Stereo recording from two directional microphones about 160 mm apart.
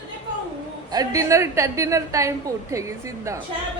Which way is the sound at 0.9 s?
20° right (ahead or behind).